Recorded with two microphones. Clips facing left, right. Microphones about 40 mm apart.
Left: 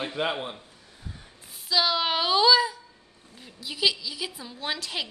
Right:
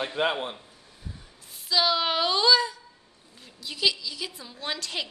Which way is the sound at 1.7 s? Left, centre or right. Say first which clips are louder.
Even; centre.